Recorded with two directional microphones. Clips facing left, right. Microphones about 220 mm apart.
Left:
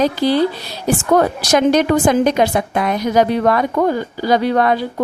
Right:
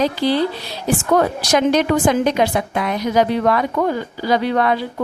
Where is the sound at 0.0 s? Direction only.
45° left (ahead or behind).